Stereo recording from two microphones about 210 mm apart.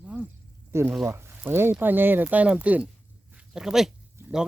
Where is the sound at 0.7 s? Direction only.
10° right (ahead or behind).